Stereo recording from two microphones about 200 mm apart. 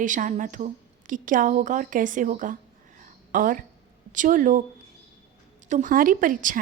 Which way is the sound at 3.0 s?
45° right (ahead or behind).